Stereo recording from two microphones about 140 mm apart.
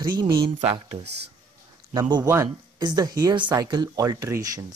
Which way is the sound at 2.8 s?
30° right (ahead or behind).